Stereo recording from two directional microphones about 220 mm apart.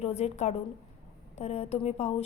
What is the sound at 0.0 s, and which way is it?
A woman's voice, 30° left (ahead or behind).